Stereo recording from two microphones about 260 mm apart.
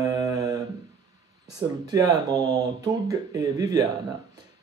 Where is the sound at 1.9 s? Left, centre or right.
Centre.